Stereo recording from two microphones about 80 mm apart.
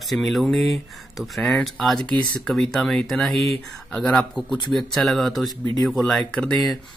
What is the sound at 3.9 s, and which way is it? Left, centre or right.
Speech, centre.